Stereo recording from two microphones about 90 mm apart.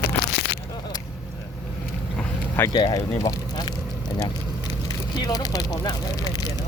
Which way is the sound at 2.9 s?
40° left (ahead or behind).